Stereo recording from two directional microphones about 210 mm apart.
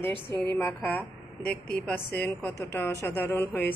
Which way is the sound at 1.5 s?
45° left (ahead or behind).